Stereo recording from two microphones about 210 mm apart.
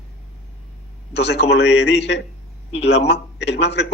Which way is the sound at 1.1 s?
55° left (ahead or behind).